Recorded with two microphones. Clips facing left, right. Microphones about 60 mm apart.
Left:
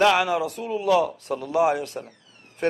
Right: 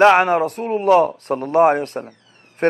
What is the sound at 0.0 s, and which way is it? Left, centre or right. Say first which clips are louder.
A man's voice: right 7 dB; right.